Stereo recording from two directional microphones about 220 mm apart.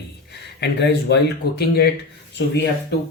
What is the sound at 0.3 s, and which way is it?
Speech, 50° left (ahead or behind).